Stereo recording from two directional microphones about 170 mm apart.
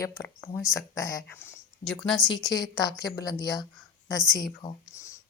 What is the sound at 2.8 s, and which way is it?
A woman's voice, 25° left (ahead or behind).